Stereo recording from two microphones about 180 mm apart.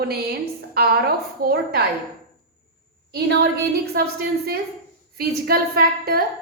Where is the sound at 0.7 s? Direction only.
60° right (ahead or behind).